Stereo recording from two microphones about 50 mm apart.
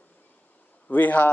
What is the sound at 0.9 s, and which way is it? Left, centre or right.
Speech, left.